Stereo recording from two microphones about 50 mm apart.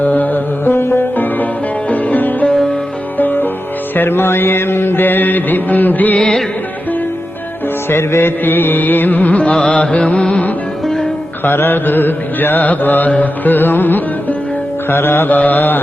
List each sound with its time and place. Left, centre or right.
0.0 s music: left
1.1 s music: left
3.9 s mantra: left
7.9 s music: left
11.4 s mantra: left
13.1 s music: left
14.8 s mantra: left
15.4 s music: left